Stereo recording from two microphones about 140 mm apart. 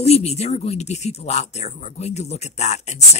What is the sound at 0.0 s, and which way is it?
Speech, 50° left (ahead or behind).